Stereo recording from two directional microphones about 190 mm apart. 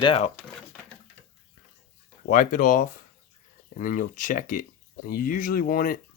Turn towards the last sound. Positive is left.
turn(degrees=50)  # may be behind; listen again after turning